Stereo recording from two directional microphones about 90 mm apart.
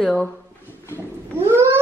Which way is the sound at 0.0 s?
5° left (ahead or behind).